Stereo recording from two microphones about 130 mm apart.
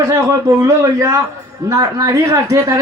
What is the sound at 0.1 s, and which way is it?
Speech, 25° right (ahead or behind).